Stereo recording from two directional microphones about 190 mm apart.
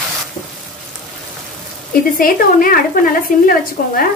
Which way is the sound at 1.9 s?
50° left (ahead or behind).